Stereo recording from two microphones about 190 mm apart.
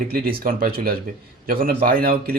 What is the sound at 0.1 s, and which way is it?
Speech, 50° right (ahead or behind).